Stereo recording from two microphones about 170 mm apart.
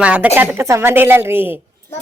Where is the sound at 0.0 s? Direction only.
5° right (ahead or behind).